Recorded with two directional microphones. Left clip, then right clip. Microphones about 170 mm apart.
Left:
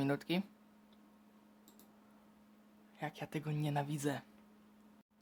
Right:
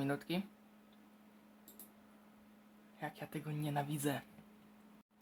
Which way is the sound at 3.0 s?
40° left (ahead or behind).